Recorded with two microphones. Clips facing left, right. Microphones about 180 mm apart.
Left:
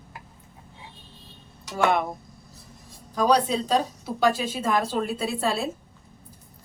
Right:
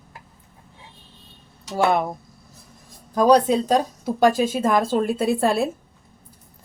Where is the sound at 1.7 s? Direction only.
40° right (ahead or behind).